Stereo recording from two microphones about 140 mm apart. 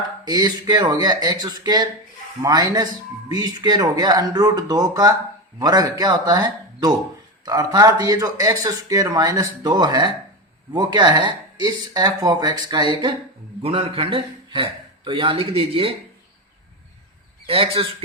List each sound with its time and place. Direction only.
0.3 s speech: 30° right (ahead or behind)
13.6 s a man's voice: 40° right (ahead or behind)
17.4 s speech: 40° right (ahead or behind)